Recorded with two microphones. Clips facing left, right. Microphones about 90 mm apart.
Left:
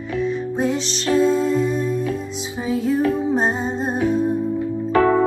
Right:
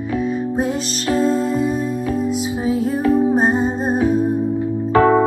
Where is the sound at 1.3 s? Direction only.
45° right (ahead or behind).